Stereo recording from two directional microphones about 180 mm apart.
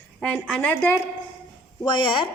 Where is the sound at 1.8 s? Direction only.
25° left (ahead or behind).